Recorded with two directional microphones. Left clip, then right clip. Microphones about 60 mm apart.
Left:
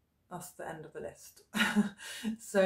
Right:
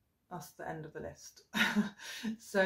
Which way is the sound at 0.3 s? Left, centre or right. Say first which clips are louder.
Even; left.